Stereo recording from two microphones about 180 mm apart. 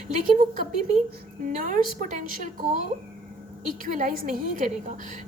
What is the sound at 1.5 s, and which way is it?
A woman's voice, 50° right (ahead or behind).